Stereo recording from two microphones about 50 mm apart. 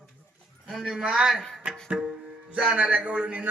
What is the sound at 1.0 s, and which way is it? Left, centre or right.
Music, centre.